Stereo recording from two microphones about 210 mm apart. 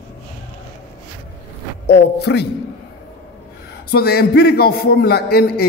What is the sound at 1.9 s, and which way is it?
Speech, 55° left (ahead or behind).